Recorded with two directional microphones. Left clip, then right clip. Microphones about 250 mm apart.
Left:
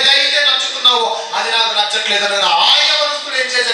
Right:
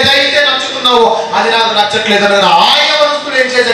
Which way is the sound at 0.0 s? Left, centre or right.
Centre.